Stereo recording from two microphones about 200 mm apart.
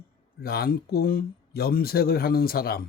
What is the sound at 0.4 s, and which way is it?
Speech, 50° left (ahead or behind).